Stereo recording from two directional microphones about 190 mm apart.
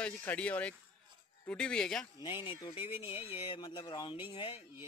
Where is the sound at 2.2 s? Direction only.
25° left (ahead or behind).